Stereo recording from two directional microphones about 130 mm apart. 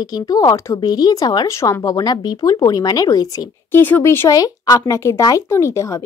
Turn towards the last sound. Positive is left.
turn(degrees=25)  # may be behind; listen again after turning